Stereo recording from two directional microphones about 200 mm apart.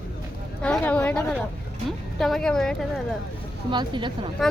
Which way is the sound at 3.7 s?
25° right (ahead or behind).